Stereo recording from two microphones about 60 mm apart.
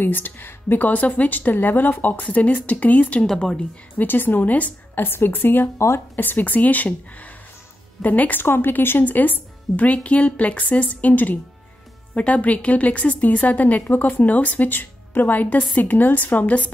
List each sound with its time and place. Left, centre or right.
0.0 s a woman's voice: left
3.3 s a woman's voice: centre
4.0 s a woman's voice: left